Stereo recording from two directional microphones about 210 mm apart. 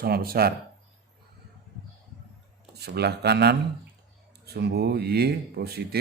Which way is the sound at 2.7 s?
50° right (ahead or behind).